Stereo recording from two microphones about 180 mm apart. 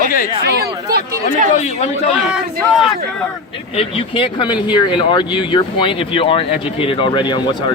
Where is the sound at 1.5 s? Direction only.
40° left (ahead or behind).